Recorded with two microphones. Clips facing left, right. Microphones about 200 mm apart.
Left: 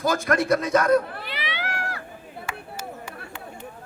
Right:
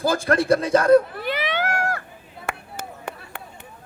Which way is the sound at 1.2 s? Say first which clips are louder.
Right 8 dB; 45° right (ahead or behind).